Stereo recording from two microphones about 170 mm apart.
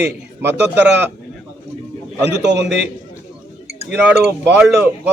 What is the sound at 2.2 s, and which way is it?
Speech, 90° right.